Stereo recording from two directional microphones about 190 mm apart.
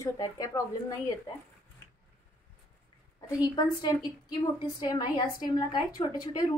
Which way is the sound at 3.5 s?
25° left (ahead or behind).